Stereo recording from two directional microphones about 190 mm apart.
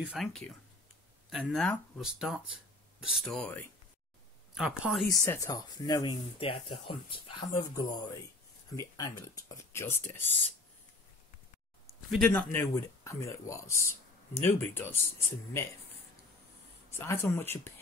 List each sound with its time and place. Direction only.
0.0 s speech: 5° right (ahead or behind)
5.0 s speech: 15° left (ahead or behind)
12.1 s speech: 10° left (ahead or behind)
16.9 s speech: 10° left (ahead or behind)